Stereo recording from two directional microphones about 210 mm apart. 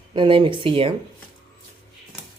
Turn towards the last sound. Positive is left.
turn(degrees=-25)  # may be behind; listen again after turning